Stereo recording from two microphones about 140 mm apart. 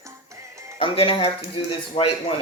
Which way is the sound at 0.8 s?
40° left (ahead or behind).